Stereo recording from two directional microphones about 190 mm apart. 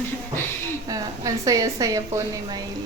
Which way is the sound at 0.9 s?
20° right (ahead or behind).